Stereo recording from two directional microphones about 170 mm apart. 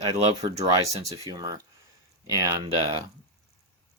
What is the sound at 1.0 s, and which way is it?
Speech, 25° right (ahead or behind).